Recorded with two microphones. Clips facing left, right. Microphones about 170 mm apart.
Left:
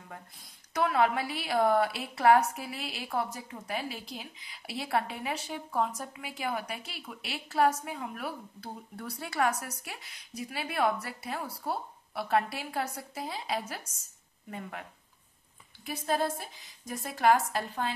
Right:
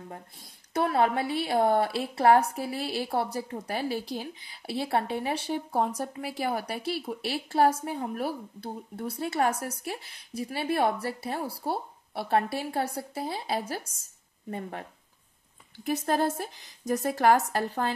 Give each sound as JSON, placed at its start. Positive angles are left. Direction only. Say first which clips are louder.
{"t": 0.7, "sound": "a woman's voice", "louder": "right 2 dB", "side_deg": -35}